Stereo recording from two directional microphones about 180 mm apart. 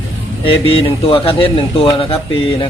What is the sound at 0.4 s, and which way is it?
A man's voice, 30° left (ahead or behind).